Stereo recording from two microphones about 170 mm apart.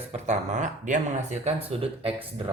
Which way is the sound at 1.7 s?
35° right (ahead or behind).